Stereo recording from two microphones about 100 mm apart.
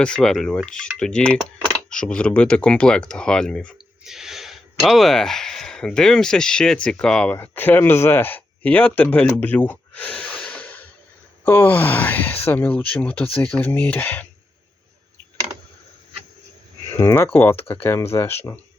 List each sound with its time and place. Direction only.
0.0 s filing: 5° left (ahead or behind)
0.5 s speech: 10° left (ahead or behind)
4.0 s speech: 5° right (ahead or behind); by 14.3 s 15° left (ahead or behind)
17.0 s speech: 25° left (ahead or behind)